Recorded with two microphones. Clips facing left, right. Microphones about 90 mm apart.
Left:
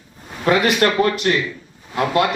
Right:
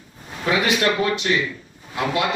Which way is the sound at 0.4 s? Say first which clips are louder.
Left 4 dB; 50° left (ahead or behind).